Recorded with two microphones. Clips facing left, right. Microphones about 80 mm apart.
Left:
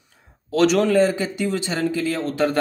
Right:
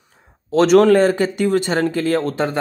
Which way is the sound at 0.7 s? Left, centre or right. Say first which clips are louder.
Right 9 dB; right.